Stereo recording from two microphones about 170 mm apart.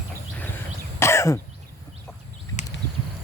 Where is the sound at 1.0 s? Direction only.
15° left (ahead or behind).